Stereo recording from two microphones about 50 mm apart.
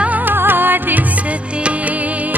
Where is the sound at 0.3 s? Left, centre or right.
Right.